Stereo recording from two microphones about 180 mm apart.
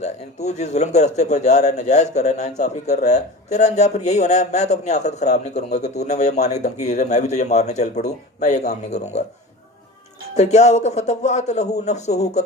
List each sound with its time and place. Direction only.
0.0 s a man's voice: 40° left (ahead or behind)
10.3 s a man's voice: 40° left (ahead or behind)